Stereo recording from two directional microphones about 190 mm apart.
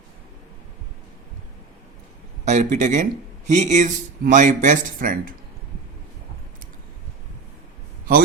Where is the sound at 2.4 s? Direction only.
40° right (ahead or behind).